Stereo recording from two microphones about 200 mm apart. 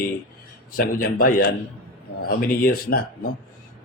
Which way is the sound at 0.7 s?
50° left (ahead or behind).